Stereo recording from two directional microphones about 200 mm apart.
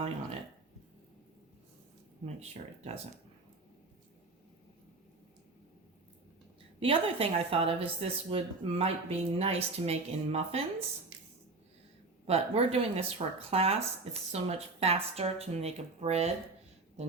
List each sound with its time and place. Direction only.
2.2 s speech: 30° right (ahead or behind)
6.7 s speech: 30° right (ahead or behind)
12.2 s speech: 30° right (ahead or behind)